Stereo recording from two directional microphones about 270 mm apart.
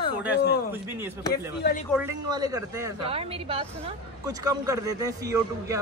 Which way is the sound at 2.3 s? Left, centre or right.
Centre.